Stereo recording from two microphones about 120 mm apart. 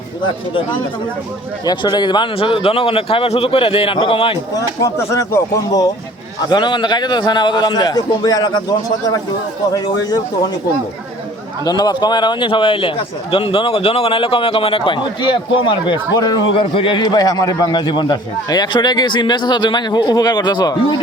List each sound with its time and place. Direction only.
1.6 s a man's voice: 40° left (ahead or behind)
4.5 s speech: 25° left (ahead or behind)
6.5 s a man's voice: 40° left (ahead or behind)
9.7 s a man's voice: 30° left (ahead or behind)
11.6 s a man's voice: 35° left (ahead or behind)
16.6 s a man's voice: 45° left (ahead or behind)